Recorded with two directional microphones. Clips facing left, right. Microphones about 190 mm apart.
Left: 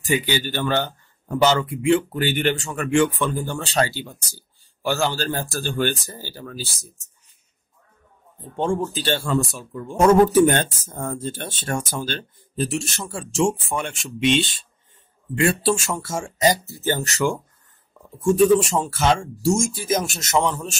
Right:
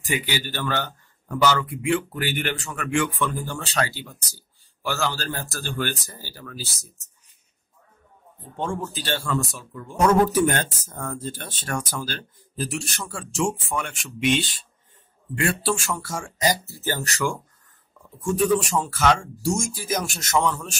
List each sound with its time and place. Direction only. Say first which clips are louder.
0.1 s speech: left 5 dB; 25° left (ahead or behind)
8.5 s speech: left 6 dB; 30° left (ahead or behind)